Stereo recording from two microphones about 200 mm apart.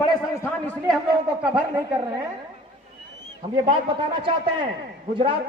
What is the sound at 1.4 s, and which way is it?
Speech, 5° right (ahead or behind).